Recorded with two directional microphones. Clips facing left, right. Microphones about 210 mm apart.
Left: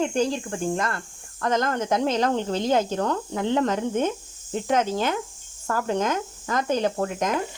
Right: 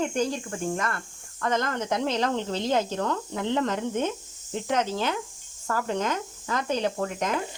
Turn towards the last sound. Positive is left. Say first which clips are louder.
# left 3 dB
turn(degrees=45)  # may be behind; listen again after turning